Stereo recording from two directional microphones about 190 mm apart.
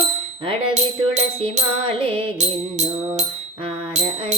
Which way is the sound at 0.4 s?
35° right (ahead or behind).